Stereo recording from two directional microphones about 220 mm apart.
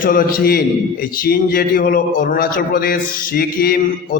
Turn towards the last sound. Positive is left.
turn(degrees=40)  # may be behind; listen again after turning